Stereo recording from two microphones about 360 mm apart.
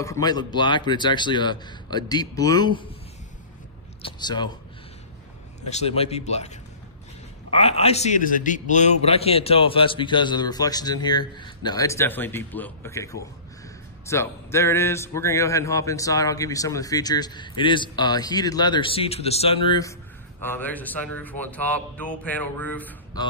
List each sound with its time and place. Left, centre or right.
0.0 s speech: centre
4.0 s speech: centre
5.6 s speech: centre